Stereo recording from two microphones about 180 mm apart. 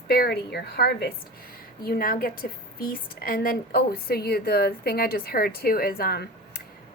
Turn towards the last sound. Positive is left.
turn(degrees=60)  # may be behind; listen again after turning